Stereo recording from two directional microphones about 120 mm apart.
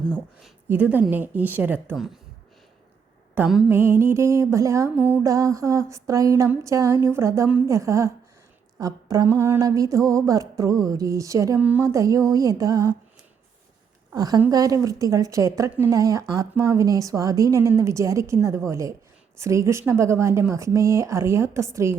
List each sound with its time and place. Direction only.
0.7 s speech: 15° right (ahead or behind)
3.4 s a sound: 15° right (ahead or behind)
3.7 s a woman's voice: 20° right (ahead or behind)
4.9 s speech: 15° right (ahead or behind)
5.2 s a woman's voice: 25° right (ahead or behind)
14.1 s a woman's voice: 30° right (ahead or behind)